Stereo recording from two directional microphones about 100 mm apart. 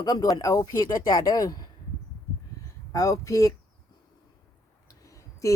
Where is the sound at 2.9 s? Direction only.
35° left (ahead or behind).